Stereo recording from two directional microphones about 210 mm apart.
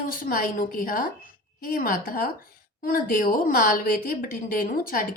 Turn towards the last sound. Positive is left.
turn(degrees=45)  # may be behind; listen again after turning